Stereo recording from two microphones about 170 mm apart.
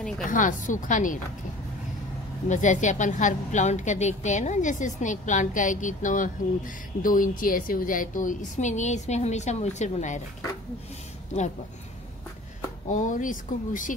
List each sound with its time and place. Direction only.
0.3 s a woman's voice: 50° left (ahead or behind)
2.4 s a woman's voice: 45° left (ahead or behind)
12.8 s a woman's voice: 45° left (ahead or behind)